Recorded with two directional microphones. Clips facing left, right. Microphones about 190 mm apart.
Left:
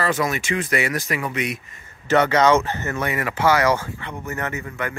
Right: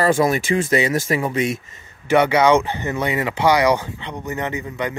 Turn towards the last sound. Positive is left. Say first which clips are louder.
# right 3 dB
turn(degrees=-15)  # may be behind; listen again after turning